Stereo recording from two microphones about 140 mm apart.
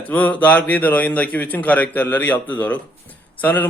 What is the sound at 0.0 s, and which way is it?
A man's voice, 10° left (ahead or behind).